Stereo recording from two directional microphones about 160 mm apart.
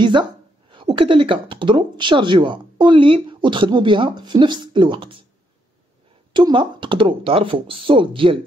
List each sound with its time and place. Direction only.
0.0 s speech: 30° right (ahead or behind)
6.3 s speech: 30° right (ahead or behind)